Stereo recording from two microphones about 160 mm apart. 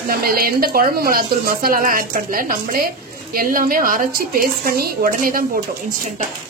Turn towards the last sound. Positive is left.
turn(degrees=-60)  # may be behind; listen again after turning